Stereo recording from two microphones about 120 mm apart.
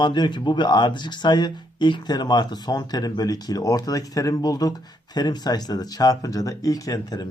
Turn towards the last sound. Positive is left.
turn(degrees=30)  # may be behind; listen again after turning